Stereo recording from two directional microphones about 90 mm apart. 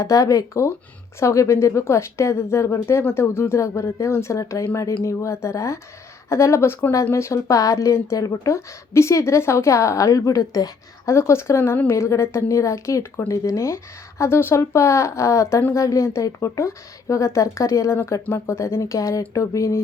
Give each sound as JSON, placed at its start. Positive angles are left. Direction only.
{"t": 0.0, "sound": "speech", "side_deg": 40}
{"t": 13.3, "sound": "speech", "side_deg": 40}